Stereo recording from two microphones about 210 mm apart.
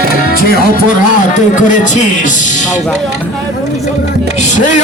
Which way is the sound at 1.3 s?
35° left (ahead or behind).